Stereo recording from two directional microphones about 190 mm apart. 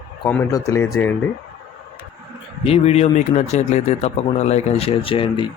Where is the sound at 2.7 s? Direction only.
35° left (ahead or behind).